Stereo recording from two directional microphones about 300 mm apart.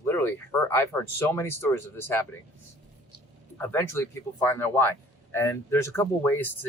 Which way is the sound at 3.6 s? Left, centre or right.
Centre.